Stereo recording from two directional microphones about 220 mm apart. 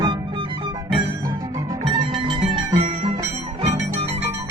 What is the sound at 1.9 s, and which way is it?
Music, 20° right (ahead or behind).